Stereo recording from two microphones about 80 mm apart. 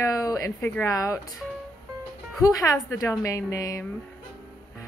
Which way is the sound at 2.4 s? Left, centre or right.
Left.